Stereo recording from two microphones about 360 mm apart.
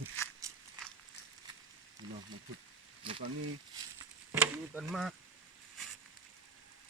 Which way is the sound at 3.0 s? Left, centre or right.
Centre.